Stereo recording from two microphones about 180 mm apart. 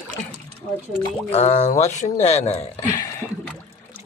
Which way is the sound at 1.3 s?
40° left (ahead or behind).